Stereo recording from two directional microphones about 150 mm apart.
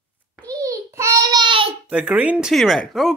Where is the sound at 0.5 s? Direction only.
25° right (ahead or behind).